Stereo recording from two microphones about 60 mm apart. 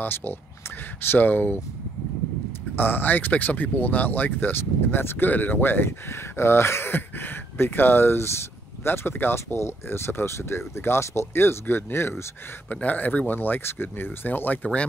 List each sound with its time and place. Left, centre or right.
0.0 s speech: left
2.7 s speech: left
12.8 s speech: left